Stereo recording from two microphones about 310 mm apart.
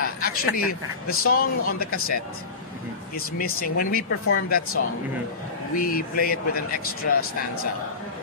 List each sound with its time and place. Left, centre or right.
0.0 s a sound: left
0.6 s speech: left
3.3 s speech: left
5.8 s speech: left